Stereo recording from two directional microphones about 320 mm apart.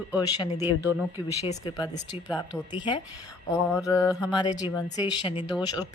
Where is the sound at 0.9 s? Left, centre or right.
Centre.